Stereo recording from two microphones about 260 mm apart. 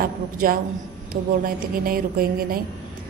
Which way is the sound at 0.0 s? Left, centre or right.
Right.